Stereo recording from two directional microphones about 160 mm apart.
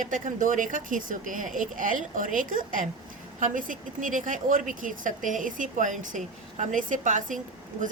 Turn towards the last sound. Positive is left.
turn(degrees=-55)  # may be behind; listen again after turning